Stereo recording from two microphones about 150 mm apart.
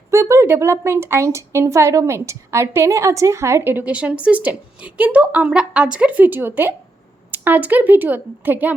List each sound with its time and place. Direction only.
0.1 s a woman's voice: 20° right (ahead or behind)